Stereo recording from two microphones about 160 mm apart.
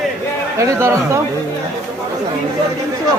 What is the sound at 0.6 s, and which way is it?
Speech, 20° right (ahead or behind).